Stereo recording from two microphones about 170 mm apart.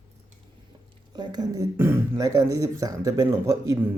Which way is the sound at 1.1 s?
25° right (ahead or behind).